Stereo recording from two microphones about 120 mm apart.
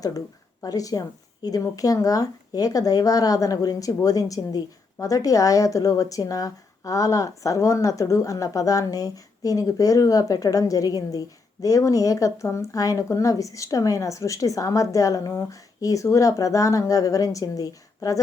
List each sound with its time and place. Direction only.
0.6 s speech: 30° left (ahead or behind)